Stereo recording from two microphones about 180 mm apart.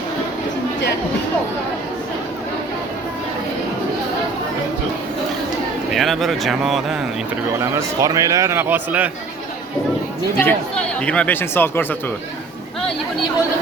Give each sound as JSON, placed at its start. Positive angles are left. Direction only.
{"t": 5.9, "sound": "speech", "side_deg": 0}
{"t": 7.6, "sound": "a man's voice", "side_deg": -15}
{"t": 10.4, "sound": "speech", "side_deg": 5}